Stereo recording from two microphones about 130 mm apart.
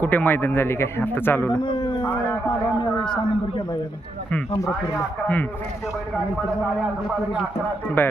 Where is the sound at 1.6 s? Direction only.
35° left (ahead or behind).